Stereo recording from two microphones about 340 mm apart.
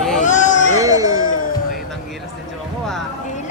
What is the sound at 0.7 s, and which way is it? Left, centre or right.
Music, centre.